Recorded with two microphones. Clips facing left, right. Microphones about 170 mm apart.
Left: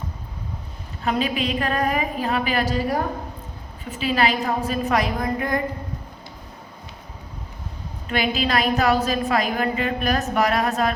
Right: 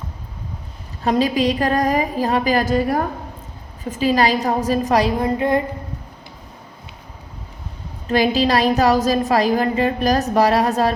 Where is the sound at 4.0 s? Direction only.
40° right (ahead or behind).